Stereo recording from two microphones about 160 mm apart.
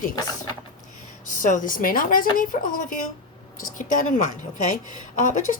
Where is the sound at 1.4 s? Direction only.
55° left (ahead or behind).